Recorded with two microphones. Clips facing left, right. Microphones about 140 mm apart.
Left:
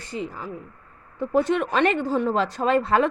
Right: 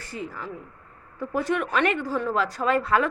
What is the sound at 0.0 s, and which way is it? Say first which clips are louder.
A woman's voice: left 3 dB; 20° left (ahead or behind).